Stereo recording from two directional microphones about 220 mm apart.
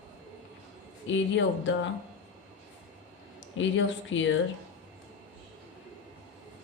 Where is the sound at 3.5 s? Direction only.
60° left (ahead or behind).